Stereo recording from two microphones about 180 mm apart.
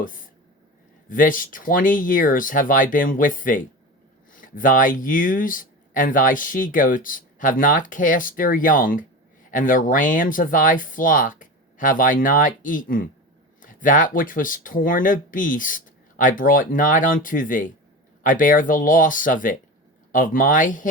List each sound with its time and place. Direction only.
1.1 s speech: 50° left (ahead or behind)